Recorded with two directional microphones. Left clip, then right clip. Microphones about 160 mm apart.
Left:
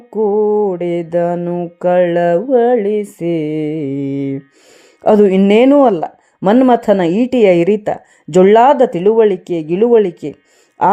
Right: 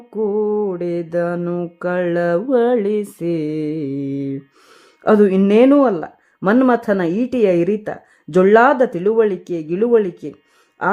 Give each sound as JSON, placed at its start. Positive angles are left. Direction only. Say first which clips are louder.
{"t": 0.3, "sound": "mantra", "louder": "left 6 dB", "side_deg": 0}
{"t": 0.7, "sound": "music", "louder": "left 5 dB", "side_deg": 15}
{"t": 1.4, "sound": "mantra", "louder": "left 3 dB", "side_deg": 0}
{"t": 1.8, "sound": "music", "louder": "left 8 dB", "side_deg": 10}
{"t": 2.5, "sound": "mantra", "louder": "left 3 dB", "side_deg": 0}
{"t": 3.2, "sound": "music", "louder": "left 4 dB", "side_deg": 10}
{"t": 5.0, "sound": "a woman's voice", "louder": "left 4 dB", "side_deg": 20}